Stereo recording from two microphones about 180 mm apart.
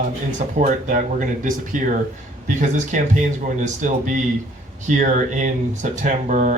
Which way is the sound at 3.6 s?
45° right (ahead or behind).